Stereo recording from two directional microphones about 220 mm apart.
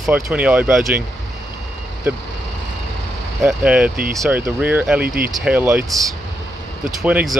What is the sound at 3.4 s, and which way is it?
Speech, 5° right (ahead or behind).